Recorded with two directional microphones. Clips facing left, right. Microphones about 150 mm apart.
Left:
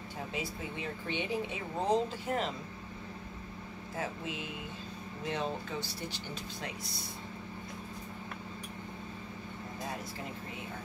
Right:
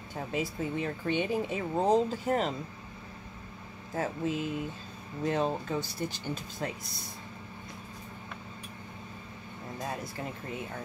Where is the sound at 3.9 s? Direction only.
45° right (ahead or behind).